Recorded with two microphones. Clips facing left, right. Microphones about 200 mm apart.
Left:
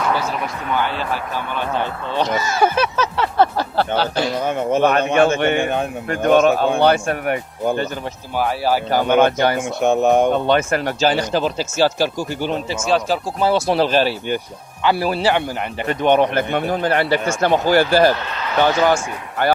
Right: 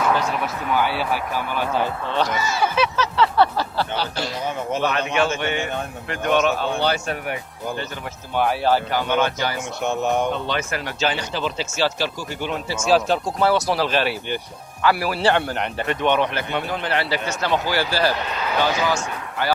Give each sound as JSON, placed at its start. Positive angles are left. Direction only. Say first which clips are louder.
{"t": 0.7, "sound": "speech", "louder": "even", "side_deg": -10}
{"t": 2.3, "sound": "a sound", "louder": "left 4 dB", "side_deg": 50}
{"t": 8.4, "sound": "speech", "louder": "even", "side_deg": 5}
{"t": 8.9, "sound": "a sound", "louder": "left 6 dB", "side_deg": 50}
{"t": 12.8, "sound": "speech", "louder": "right 1 dB", "side_deg": 0}
{"t": 13.4, "sound": "speech", "louder": "left 4 dB", "side_deg": 25}
{"t": 13.9, "sound": "speech", "louder": "left 5 dB", "side_deg": 35}
{"t": 14.8, "sound": "speech", "louder": "left 2 dB", "side_deg": 25}
{"t": 15.2, "sound": "speech", "louder": "left 1 dB", "side_deg": 10}
{"t": 15.9, "sound": "a sound", "louder": "left 6 dB", "side_deg": 45}